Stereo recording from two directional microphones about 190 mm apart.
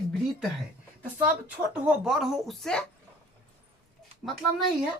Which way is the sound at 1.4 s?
5° right (ahead or behind).